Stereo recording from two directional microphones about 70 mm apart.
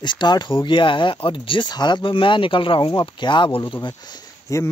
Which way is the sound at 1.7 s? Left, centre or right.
Left.